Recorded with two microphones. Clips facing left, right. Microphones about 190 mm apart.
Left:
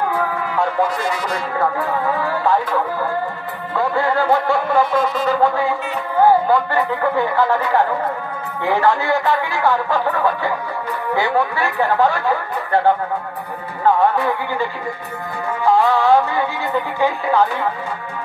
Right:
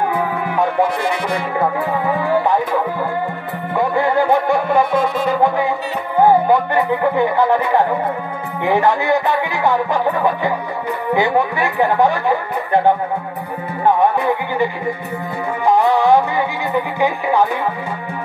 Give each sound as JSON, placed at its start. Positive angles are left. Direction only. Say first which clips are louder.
{"t": 0.1, "sound": "music", "louder": "right 2 dB", "side_deg": -15}
{"t": 0.8, "sound": "music", "louder": "right 2 dB", "side_deg": -60}
{"t": 1.3, "sound": "music", "louder": "right 2 dB", "side_deg": -20}
{"t": 6.1, "sound": "music", "louder": "right 1 dB", "side_deg": -20}